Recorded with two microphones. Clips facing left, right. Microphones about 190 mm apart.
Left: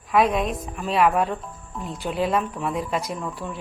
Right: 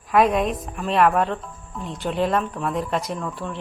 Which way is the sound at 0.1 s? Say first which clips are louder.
Right 2 dB; centre (ahead or behind).